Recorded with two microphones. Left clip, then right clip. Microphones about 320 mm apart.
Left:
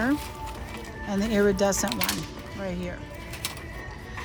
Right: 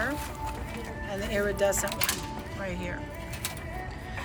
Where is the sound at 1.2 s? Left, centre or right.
Centre.